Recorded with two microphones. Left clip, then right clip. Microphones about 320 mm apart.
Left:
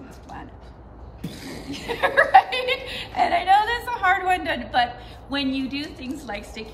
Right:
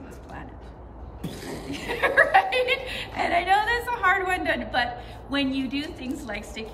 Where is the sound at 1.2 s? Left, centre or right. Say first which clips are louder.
Right 1 dB; centre.